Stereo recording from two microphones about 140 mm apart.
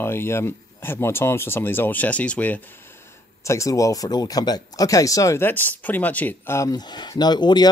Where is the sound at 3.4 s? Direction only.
20° left (ahead or behind).